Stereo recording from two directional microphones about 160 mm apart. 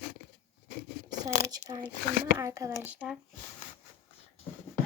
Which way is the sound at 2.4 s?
20° right (ahead or behind).